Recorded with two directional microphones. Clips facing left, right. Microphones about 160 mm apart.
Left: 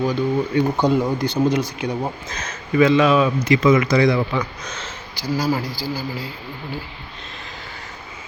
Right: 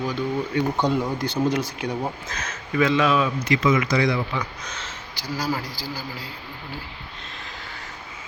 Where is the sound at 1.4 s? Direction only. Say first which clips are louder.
Left 3 dB; 5° right (ahead or behind).